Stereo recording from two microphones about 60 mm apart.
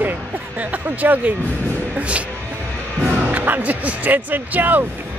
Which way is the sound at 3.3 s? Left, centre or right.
Right.